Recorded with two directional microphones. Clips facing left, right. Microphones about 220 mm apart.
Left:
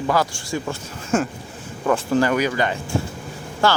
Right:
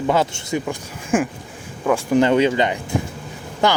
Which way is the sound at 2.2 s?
25° right (ahead or behind).